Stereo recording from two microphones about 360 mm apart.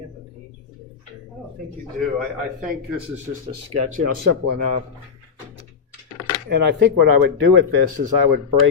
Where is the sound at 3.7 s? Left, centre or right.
Right.